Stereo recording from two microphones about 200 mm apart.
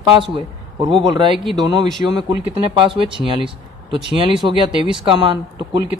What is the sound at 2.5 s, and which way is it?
Speech, 25° right (ahead or behind).